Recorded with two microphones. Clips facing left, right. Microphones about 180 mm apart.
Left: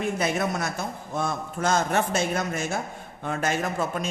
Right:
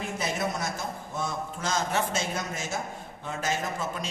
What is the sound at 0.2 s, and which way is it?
A man's voice, 60° left (ahead or behind).